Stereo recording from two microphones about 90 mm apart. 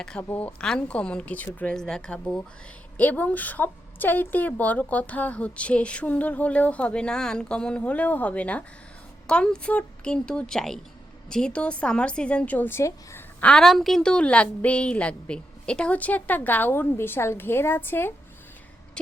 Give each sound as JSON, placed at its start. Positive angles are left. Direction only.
{"t": 0.0, "sound": "a woman's voice", "side_deg": 10}
{"t": 13.4, "sound": "a woman's voice", "side_deg": 10}